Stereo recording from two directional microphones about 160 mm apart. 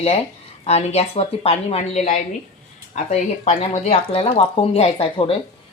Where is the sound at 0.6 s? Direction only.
40° left (ahead or behind).